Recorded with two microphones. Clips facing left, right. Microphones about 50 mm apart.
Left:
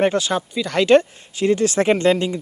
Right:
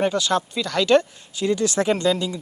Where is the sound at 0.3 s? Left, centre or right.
Centre.